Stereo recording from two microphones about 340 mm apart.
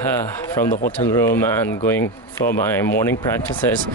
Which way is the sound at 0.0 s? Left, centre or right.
Centre.